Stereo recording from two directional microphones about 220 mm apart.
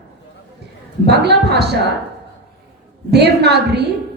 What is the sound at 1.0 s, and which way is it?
Speech, 50° right (ahead or behind).